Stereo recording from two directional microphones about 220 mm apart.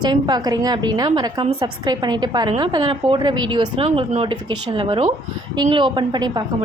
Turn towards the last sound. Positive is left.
turn(degrees=-20)  # may be behind; listen again after turning